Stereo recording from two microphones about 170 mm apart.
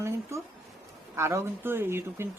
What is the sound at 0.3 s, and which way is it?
Speech, 15° right (ahead or behind).